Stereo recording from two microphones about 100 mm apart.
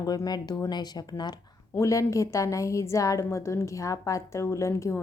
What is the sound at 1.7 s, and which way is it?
A woman's voice, 30° left (ahead or behind).